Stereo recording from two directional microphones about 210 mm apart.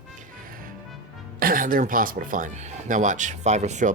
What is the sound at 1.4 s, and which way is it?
Speech, 40° right (ahead or behind).